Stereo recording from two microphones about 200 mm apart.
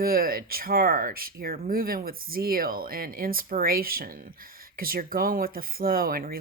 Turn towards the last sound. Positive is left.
turn(degrees=-45)  # may be behind; listen again after turning